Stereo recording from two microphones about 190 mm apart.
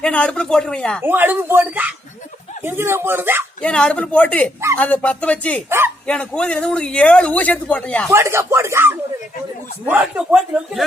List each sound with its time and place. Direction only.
0.0 s a man's voice: 5° left (ahead or behind)
1.0 s speech: 10° right (ahead or behind)
3.6 s a man's voice: 5° left (ahead or behind)
5.6 s speech: 15° right (ahead or behind)
6.1 s a man's voice: 5° left (ahead or behind)
8.1 s a man's voice: 15° right (ahead or behind)